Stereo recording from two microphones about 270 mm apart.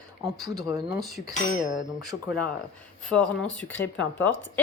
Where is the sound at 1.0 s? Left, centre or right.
Centre.